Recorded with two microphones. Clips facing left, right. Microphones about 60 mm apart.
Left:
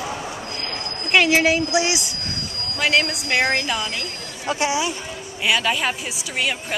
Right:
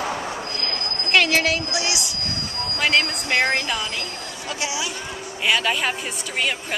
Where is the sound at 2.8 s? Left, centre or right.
Centre.